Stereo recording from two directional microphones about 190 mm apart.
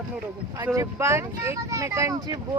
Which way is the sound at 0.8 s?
15° right (ahead or behind).